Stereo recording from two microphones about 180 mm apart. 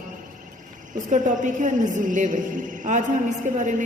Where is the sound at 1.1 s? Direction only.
45° right (ahead or behind).